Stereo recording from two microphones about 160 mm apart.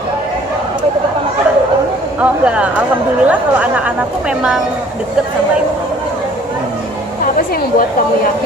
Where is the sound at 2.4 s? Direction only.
5° right (ahead or behind).